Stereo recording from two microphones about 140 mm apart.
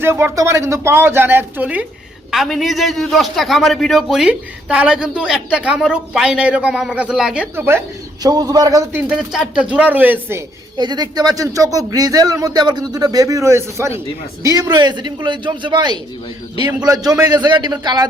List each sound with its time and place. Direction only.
0.0 s speech: 20° right (ahead or behind)
2.3 s a man's voice: centre (ahead or behind)
7.5 s speech: 15° right (ahead or behind)
8.2 s speech: 25° right (ahead or behind)
9.0 s speech: 5° right (ahead or behind)
10.8 s speech: 30° right (ahead or behind)